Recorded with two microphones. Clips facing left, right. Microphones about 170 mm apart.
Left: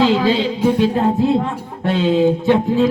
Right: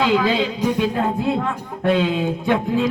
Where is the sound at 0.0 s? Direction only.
30° left (ahead or behind).